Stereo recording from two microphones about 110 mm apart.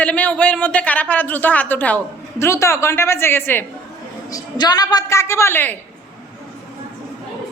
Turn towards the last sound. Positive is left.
turn(degrees=20)  # may be behind; listen again after turning